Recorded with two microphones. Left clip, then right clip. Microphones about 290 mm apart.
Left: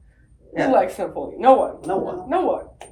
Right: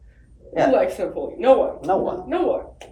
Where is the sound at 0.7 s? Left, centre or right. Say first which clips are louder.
Left 1 dB; centre.